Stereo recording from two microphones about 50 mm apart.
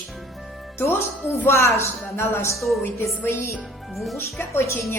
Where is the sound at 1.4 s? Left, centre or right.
Left.